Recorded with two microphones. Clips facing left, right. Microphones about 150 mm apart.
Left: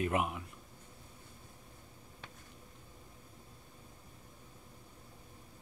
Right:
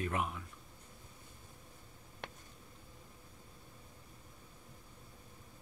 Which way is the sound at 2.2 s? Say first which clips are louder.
Right 6 dB; 70° right (ahead or behind).